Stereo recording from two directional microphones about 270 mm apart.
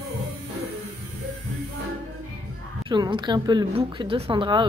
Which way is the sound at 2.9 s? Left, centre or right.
Centre.